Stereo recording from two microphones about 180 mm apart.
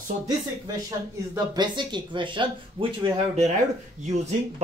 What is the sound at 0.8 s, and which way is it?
Speech, 20° right (ahead or behind).